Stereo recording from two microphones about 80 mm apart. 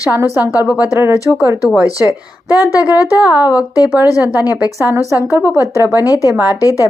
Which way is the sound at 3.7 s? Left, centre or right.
Left.